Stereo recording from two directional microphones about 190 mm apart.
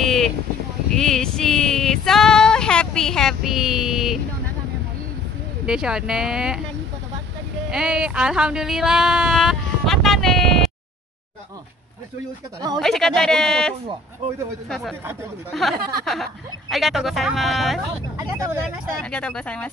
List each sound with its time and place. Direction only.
0.0 s a sound: centre (ahead or behind)
0.9 s female singing: centre (ahead or behind)
5.7 s a woman's voice: 5° right (ahead or behind)
7.7 s speech: 5° right (ahead or behind)
12.7 s a woman's voice: centre (ahead or behind)
15.5 s a woman's voice: centre (ahead or behind)
18.1 s speech: 15° right (ahead or behind)
19.0 s a woman's voice: 5° left (ahead or behind)